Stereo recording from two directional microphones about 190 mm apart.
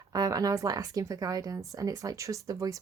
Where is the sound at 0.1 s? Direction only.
20° right (ahead or behind).